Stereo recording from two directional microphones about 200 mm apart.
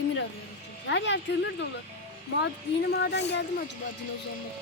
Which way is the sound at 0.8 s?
60° left (ahead or behind).